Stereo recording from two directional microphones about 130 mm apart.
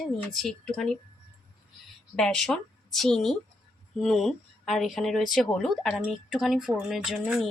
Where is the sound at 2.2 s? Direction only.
5° left (ahead or behind).